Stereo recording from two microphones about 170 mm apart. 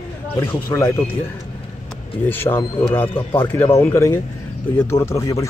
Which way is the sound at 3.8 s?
15° left (ahead or behind).